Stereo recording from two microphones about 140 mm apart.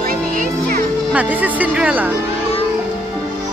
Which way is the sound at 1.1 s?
10° right (ahead or behind).